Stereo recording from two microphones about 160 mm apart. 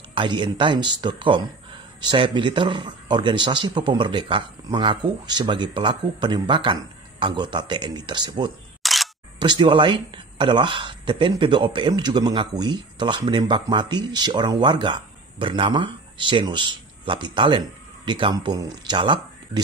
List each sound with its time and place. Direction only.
0.1 s speech: 30° right (ahead or behind)
8.8 s single-lens reflex camera: centre (ahead or behind)
9.4 s speech: 30° right (ahead or behind)